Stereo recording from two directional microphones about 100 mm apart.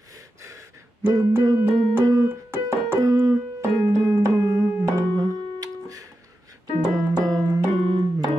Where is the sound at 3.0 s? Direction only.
35° right (ahead or behind).